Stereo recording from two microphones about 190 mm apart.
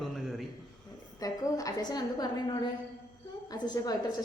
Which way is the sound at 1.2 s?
20° left (ahead or behind).